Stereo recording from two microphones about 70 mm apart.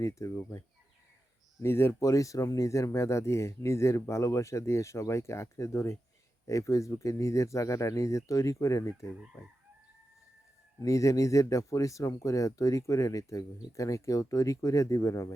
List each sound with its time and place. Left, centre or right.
0.0 s speech: left
1.6 s speech: left
10.8 s speech: left